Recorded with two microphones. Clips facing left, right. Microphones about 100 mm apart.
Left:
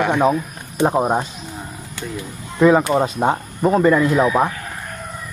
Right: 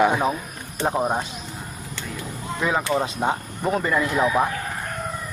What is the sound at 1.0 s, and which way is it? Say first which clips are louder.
Speech: left 4 dB; 30° left (ahead or behind).